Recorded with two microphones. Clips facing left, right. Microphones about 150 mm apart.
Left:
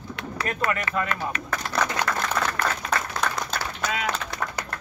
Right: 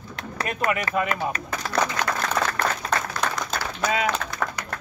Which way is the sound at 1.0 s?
15° right (ahead or behind).